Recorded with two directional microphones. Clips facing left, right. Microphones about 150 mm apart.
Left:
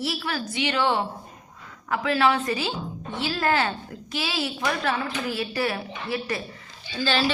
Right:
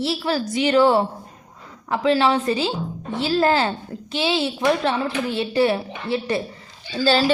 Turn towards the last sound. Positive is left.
turn(degrees=-35)  # may be behind; listen again after turning